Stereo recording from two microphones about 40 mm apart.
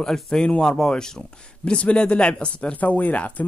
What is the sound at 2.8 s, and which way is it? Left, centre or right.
Speech, left.